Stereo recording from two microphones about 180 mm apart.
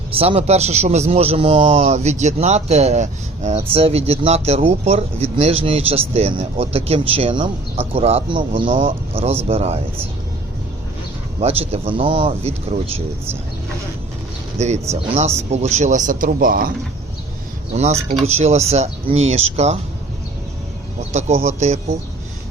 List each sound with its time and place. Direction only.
0.1 s speech: 30° right (ahead or behind)
11.3 s speech: 35° right (ahead or behind)
14.6 s speech: 35° right (ahead or behind)
18.3 s speech: 35° right (ahead or behind)
21.1 s speech: 35° right (ahead or behind)